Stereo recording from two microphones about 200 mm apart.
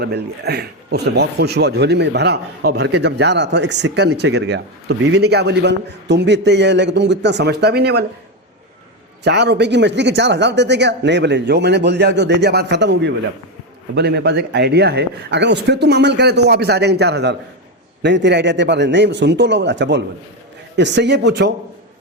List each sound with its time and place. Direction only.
0.0 s speech: 55° right (ahead or behind)
9.2 s speech: 55° right (ahead or behind)